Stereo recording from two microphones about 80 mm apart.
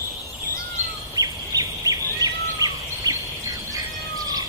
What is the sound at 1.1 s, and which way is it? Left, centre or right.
Bird, right.